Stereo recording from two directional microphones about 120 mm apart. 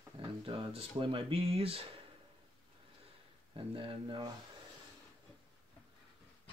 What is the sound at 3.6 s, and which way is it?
Speech, 45° right (ahead or behind).